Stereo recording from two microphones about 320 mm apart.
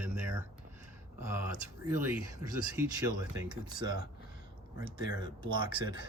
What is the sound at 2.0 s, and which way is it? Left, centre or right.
Speech, centre.